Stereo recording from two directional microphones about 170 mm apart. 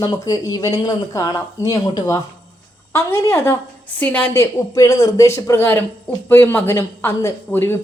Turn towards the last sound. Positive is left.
turn(degrees=15)  # may be behind; listen again after turning